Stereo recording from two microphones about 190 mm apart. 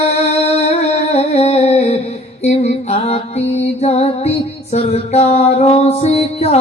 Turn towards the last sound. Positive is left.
turn(degrees=35)  # may be behind; listen again after turning